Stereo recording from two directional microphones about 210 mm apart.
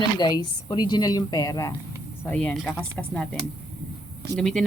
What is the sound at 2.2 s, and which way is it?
Speech, 5° left (ahead or behind).